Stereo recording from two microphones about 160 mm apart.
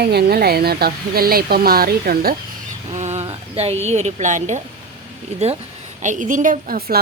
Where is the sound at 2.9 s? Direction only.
45° right (ahead or behind).